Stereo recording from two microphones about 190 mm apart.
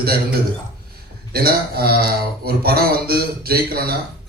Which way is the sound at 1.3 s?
55° right (ahead or behind).